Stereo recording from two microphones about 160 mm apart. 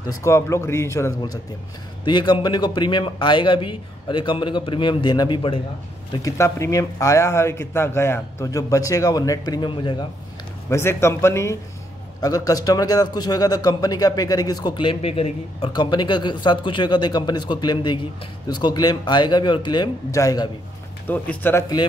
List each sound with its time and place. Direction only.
0.2 s a man's voice: 20° left (ahead or behind)
6.2 s a man's voice: 20° left (ahead or behind)
10.7 s a man's voice: 15° left (ahead or behind)